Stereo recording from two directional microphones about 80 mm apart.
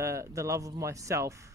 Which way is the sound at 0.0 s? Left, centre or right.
Right.